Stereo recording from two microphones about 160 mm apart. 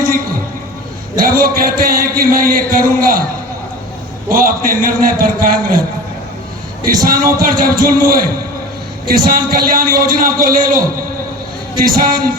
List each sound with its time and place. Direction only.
1.1 s a man's voice: 65° right (ahead or behind)
4.3 s a man's voice: 60° right (ahead or behind)
6.8 s a man's voice: 65° right (ahead or behind)
11.9 s a man's voice: 65° right (ahead or behind)